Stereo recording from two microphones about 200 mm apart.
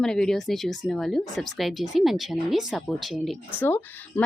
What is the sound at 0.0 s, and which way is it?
A woman's voice, 5° left (ahead or behind).